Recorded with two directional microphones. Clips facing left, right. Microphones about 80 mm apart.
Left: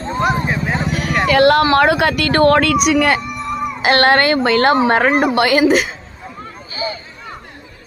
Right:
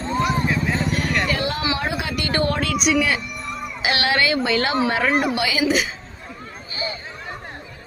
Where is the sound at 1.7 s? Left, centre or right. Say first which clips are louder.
Left 12 dB; left.